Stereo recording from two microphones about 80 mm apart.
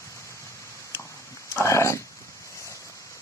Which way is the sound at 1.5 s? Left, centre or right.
Left.